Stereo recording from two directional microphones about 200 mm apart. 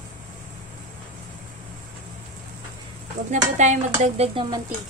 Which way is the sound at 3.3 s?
35° right (ahead or behind).